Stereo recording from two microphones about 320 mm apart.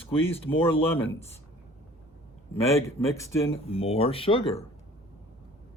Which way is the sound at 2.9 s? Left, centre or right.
Centre.